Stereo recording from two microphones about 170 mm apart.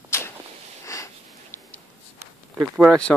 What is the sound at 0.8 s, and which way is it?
Sniff, 20° left (ahead or behind).